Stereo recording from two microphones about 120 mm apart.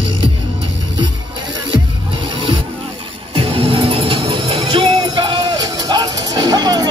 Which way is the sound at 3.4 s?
45° right (ahead or behind).